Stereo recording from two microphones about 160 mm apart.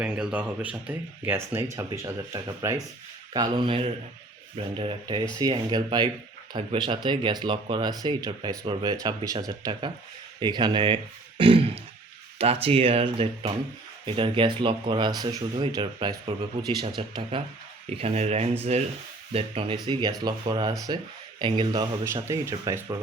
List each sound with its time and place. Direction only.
0.0 s speech: 5° right (ahead or behind); by 21.8 s 30° right (ahead or behind)
22.0 s speech: 15° right (ahead or behind)